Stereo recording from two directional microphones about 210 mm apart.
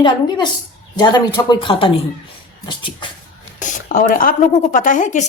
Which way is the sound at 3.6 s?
40° left (ahead or behind).